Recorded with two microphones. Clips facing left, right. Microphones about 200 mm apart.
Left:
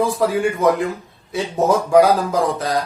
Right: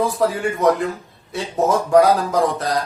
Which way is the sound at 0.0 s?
Centre (ahead or behind).